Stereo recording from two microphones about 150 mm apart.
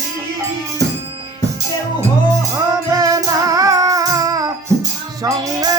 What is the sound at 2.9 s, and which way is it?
Music, 25° right (ahead or behind).